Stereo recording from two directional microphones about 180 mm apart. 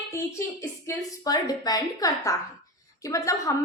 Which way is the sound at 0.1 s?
15° left (ahead or behind).